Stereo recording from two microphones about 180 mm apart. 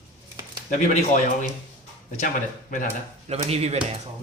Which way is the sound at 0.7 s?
45° left (ahead or behind).